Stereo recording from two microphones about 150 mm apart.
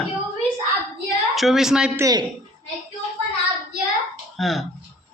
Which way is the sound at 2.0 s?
25° right (ahead or behind).